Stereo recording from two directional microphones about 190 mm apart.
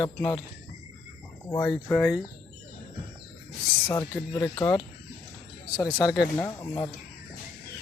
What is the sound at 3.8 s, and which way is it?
Speech, 20° left (ahead or behind).